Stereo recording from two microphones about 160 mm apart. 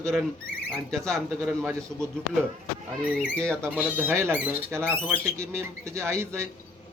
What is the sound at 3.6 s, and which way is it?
A man's voice, 10° right (ahead or behind).